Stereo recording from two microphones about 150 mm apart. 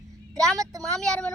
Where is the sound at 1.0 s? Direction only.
5° left (ahead or behind).